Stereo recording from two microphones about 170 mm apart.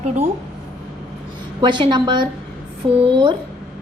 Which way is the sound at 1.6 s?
25° right (ahead or behind).